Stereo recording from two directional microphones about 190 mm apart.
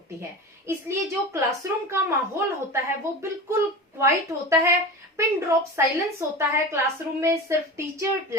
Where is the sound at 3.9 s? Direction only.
15° right (ahead or behind).